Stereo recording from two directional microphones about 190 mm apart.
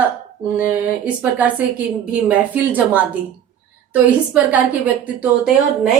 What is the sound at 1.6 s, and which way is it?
A woman's voice, 5° right (ahead or behind).